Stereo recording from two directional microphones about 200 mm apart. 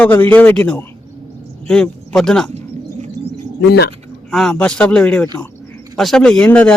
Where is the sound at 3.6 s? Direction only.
55° left (ahead or behind).